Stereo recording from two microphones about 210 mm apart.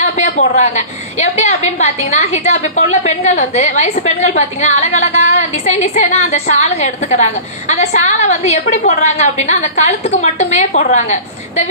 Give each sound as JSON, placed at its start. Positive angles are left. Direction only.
{"t": 0.0, "sound": "a woman's voice", "side_deg": 35}